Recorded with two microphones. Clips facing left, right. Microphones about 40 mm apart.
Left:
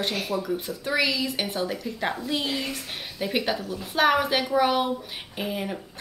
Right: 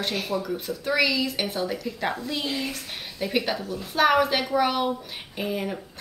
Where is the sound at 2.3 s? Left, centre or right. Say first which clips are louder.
Left 1 dB; centre.